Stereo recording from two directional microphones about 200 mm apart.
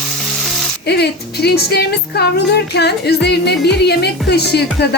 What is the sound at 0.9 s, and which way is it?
A woman's voice, 55° left (ahead or behind).